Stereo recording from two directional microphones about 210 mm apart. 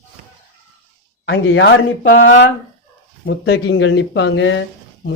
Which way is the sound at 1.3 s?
60° left (ahead or behind).